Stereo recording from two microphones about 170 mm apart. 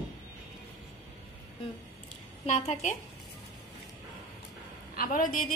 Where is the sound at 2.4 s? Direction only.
40° left (ahead or behind).